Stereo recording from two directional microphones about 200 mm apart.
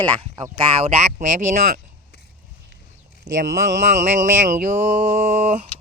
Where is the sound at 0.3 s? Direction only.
20° right (ahead or behind).